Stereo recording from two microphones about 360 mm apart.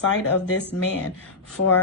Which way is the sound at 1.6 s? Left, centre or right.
Left.